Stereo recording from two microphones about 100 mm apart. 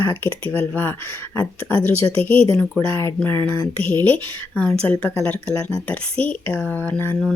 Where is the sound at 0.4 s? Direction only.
20° left (ahead or behind).